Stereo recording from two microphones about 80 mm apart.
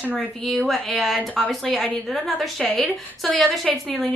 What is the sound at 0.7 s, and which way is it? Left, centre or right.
A woman's voice, centre.